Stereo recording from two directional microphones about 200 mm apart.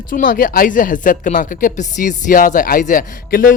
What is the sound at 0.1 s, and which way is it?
Speech, 45° left (ahead or behind).